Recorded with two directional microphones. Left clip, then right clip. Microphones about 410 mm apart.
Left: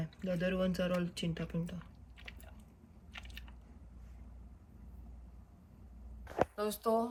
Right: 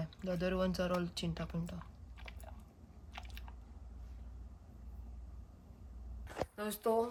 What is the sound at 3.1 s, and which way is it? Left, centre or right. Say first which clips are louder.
Chewing: left 1 dB; centre.